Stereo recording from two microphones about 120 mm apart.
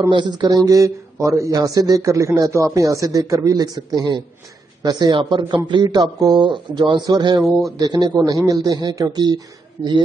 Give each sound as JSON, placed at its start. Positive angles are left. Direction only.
{"t": 0.1, "sound": "speech", "side_deg": -40}